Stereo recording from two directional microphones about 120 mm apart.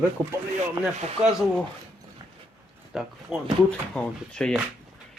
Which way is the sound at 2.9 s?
5° right (ahead or behind).